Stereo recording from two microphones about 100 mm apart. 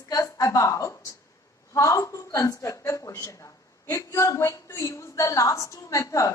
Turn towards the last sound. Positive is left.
turn(degrees=35)  # may be behind; listen again after turning